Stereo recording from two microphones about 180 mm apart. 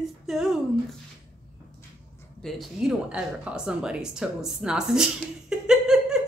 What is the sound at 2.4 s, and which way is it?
A woman's voice, centre (ahead or behind).